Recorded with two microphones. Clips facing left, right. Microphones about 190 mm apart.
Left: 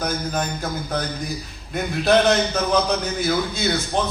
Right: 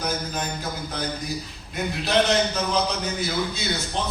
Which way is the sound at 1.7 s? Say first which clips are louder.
Left 5 dB; 55° left (ahead or behind).